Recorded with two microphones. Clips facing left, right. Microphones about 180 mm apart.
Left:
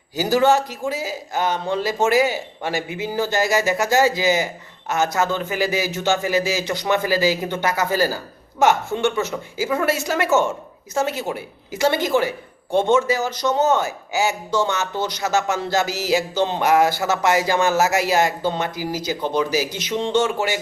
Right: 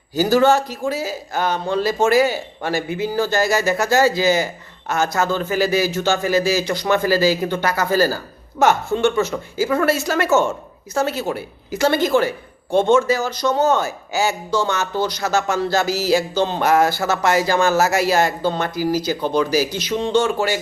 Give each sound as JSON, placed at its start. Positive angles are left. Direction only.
{"t": 0.1, "sound": "a man's voice", "side_deg": 15}